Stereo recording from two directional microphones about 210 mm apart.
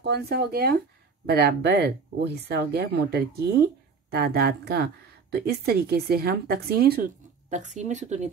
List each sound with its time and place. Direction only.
0.0 s speech: 50° right (ahead or behind)